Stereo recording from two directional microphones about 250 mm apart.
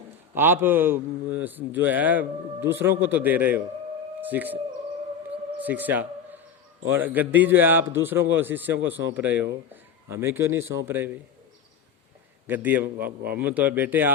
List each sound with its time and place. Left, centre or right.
0.3 s a man's voice: centre
5.3 s bird: centre
6.9 s a man's voice: centre
12.5 s a man's voice: centre
13.1 s speech: right
13.4 s a man's voice: centre